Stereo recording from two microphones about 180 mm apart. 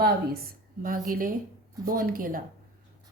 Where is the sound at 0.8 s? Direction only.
50° right (ahead or behind).